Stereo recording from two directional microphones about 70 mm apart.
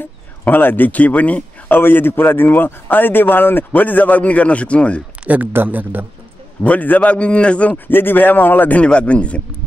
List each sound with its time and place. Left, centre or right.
0.5 s speech: left
1.8 s speech: left
5.2 s speech: right
6.6 s speech: left